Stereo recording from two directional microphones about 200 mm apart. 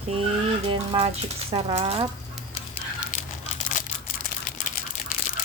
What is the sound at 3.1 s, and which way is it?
Tearing, 45° left (ahead or behind).